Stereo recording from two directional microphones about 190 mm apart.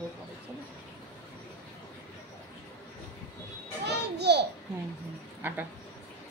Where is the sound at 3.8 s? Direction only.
60° right (ahead or behind).